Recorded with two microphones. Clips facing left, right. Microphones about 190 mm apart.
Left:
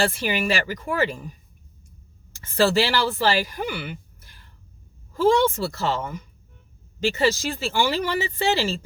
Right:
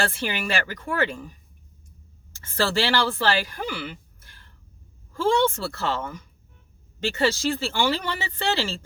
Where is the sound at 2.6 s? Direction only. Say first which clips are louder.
Left 3 dB; 15° left (ahead or behind).